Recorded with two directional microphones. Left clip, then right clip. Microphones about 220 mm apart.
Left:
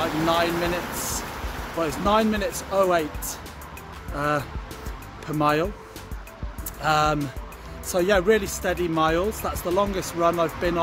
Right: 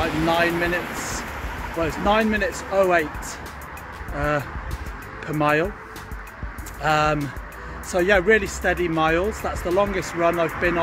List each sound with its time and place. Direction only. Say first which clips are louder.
0.0 s speech: right 2 dB; 15° left (ahead or behind)
5.4 s speech: right 2 dB; 15° left (ahead or behind)
6.8 s speech: right 1 dB; 15° left (ahead or behind)